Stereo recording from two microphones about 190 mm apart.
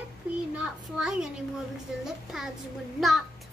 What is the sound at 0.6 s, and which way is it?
A child's voice, 5° right (ahead or behind).